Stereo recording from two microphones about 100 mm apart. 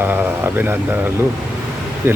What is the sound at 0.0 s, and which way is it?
Speech, 20° right (ahead or behind).